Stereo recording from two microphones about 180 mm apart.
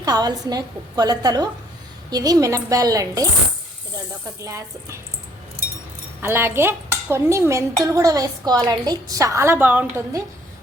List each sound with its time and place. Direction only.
0.0 s a woman's voice: 20° right (ahead or behind)
4.4 s speech: 15° right (ahead or behind)
6.2 s speech: 15° right (ahead or behind)